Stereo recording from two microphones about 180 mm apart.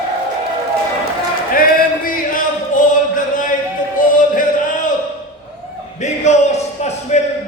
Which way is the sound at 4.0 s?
50° left (ahead or behind).